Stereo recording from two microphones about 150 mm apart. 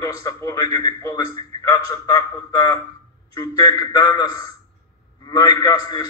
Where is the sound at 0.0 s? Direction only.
20° left (ahead or behind).